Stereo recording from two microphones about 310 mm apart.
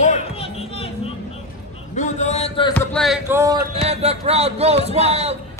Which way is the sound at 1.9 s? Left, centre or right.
Left.